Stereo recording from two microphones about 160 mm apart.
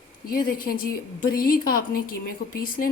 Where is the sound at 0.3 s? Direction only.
65° left (ahead or behind).